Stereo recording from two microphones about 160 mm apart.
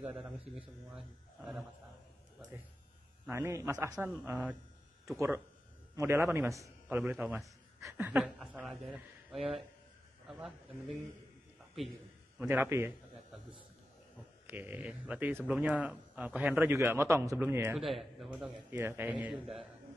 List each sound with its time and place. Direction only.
0.0 s speech: 5° right (ahead or behind)
3.3 s a man's voice: 15° right (ahead or behind)
8.2 s speech: centre (ahead or behind)
11.7 s a man's voice: centre (ahead or behind)
12.4 s speech: 10° right (ahead or behind)
14.5 s speech: 10° right (ahead or behind)
17.7 s speech: centre (ahead or behind)
18.7 s speech: 15° right (ahead or behind)